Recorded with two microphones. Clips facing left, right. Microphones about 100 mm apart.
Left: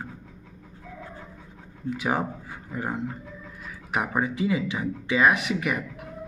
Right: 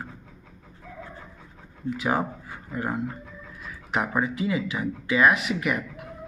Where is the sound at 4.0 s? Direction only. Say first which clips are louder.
Right 1 dB; 5° left (ahead or behind).